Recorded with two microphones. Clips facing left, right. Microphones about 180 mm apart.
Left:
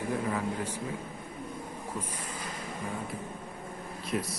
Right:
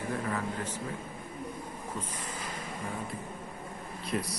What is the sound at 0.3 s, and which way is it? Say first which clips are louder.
Speech: left 2 dB; 10° left (ahead or behind).